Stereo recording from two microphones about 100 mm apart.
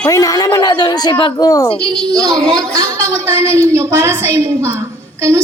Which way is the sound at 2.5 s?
35° right (ahead or behind).